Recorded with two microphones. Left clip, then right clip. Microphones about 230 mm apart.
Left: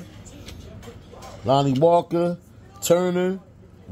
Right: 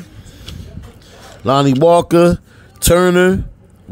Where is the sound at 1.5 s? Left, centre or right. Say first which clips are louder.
Right 7 dB; right.